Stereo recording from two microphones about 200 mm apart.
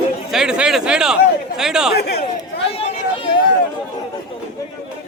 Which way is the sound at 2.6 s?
30° left (ahead or behind).